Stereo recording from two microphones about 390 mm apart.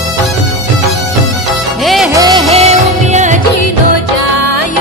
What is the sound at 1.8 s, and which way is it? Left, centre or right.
Music, centre.